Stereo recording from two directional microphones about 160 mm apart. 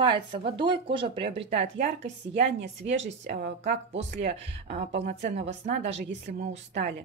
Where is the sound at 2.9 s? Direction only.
45° right (ahead or behind).